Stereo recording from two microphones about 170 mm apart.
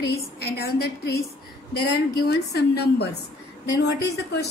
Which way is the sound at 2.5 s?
75° left (ahead or behind).